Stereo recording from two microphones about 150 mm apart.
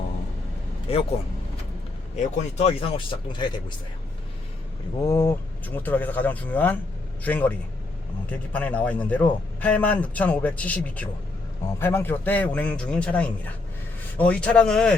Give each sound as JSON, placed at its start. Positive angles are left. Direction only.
{"t": 0.9, "sound": "speech", "side_deg": 40}
{"t": 2.1, "sound": "speech", "side_deg": 40}
{"t": 5.0, "sound": "a man's voice", "side_deg": 15}